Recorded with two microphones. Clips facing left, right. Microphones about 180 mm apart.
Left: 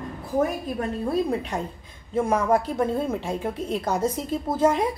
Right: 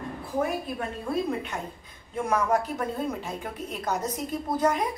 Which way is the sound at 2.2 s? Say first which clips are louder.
Left 4 dB; 30° left (ahead or behind).